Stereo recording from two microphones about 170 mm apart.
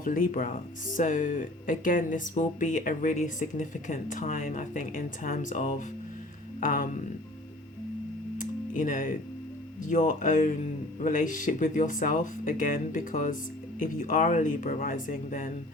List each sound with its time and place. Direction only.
0.0 s speech: 55° left (ahead or behind)
8.4 s music: 50° left (ahead or behind)
9.8 s speech: 45° left (ahead or behind)